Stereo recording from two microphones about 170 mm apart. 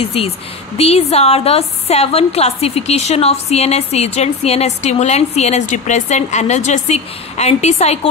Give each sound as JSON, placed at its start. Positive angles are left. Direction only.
{"t": 0.0, "sound": "a woman's voice", "side_deg": 35}